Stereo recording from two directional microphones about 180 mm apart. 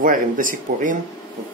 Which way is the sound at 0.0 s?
50° right (ahead or behind).